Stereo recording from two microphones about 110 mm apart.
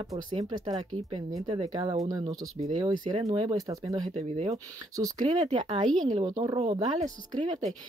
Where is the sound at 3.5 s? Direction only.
35° right (ahead or behind).